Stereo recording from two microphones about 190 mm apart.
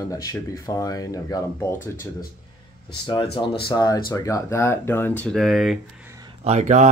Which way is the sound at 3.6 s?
20° left (ahead or behind).